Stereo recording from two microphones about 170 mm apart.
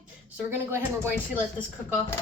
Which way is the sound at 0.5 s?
10° right (ahead or behind).